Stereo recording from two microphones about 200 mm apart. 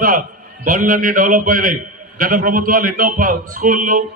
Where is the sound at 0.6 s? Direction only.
45° right (ahead or behind).